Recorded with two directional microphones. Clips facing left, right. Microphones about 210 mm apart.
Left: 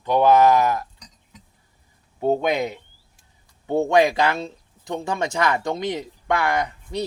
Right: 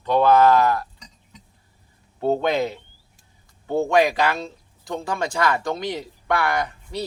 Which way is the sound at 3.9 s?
20° left (ahead or behind).